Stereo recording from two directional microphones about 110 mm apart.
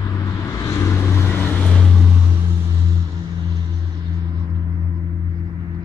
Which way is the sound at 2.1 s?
20° right (ahead or behind).